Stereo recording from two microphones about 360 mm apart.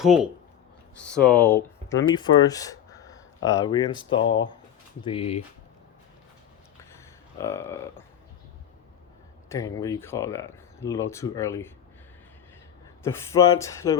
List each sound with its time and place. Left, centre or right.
1.0 s speech: centre
4.2 s speech: left
5.0 s speech: centre
6.9 s a sound: centre
9.5 s speech: centre
13.0 s speech: centre